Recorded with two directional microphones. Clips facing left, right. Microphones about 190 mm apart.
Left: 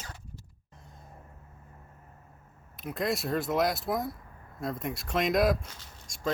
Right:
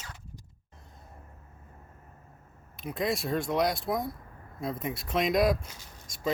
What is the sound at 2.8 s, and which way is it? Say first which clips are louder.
Speech: even; centre (ahead or behind).